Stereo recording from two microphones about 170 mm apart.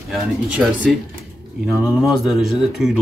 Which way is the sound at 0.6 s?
5° right (ahead or behind).